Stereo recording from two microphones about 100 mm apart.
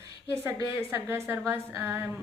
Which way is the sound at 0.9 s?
25° right (ahead or behind).